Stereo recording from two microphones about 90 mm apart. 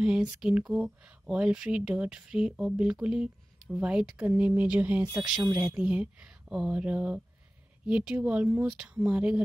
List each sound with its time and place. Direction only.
0.0 s speech: 10° right (ahead or behind)